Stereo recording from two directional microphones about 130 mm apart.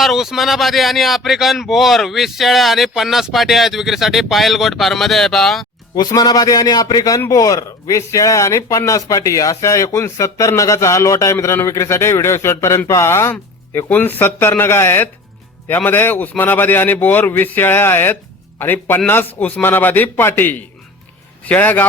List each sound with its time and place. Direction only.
0.0 s speech: centre (ahead or behind)
6.0 s a man's voice: 30° left (ahead or behind); by 21.8 s 15° left (ahead or behind)